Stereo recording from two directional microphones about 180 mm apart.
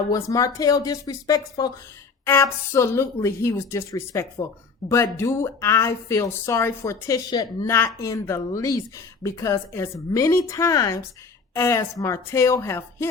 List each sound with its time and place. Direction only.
0.1 s speech: 20° left (ahead or behind)